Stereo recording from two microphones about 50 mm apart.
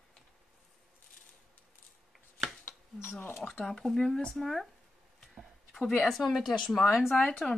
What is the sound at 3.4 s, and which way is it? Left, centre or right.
Speech, centre.